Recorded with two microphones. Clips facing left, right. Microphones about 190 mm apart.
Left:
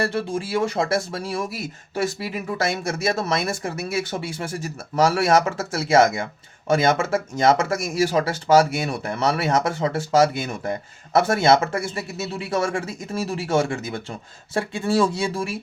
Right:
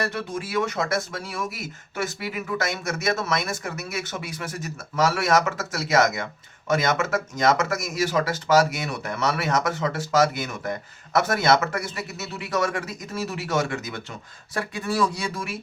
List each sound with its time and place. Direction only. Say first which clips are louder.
0.0 s speech: left 4 dB; 30° left (ahead or behind)